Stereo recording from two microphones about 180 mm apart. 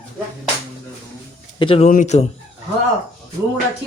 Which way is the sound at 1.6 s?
30° left (ahead or behind).